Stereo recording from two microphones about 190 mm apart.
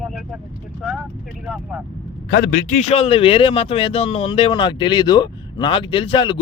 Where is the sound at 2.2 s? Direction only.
50° left (ahead or behind).